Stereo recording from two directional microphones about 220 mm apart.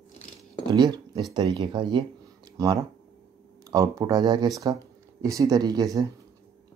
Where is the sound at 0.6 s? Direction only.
20° right (ahead or behind).